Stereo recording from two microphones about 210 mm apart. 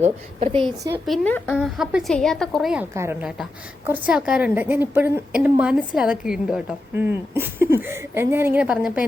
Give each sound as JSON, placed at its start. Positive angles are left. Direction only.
{"t": 0.0, "sound": "a woman's voice", "side_deg": -30}
{"t": 1.0, "sound": "a woman's voice", "side_deg": 5}
{"t": 2.9, "sound": "a woman's voice", "side_deg": -10}